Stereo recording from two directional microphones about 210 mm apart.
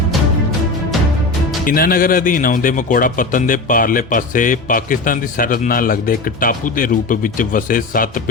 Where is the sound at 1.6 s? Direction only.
45° left (ahead or behind).